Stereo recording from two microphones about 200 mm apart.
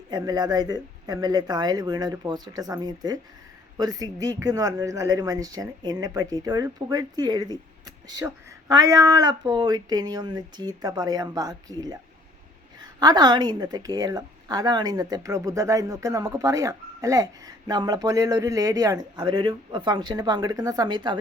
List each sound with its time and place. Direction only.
0.1 s a woman's voice: 20° right (ahead or behind)